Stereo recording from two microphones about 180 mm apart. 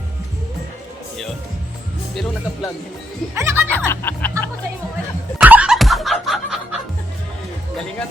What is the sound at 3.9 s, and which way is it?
Music, 10° left (ahead or behind).